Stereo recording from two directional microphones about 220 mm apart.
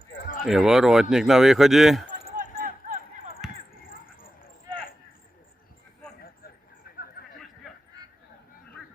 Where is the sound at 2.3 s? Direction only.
40° right (ahead or behind).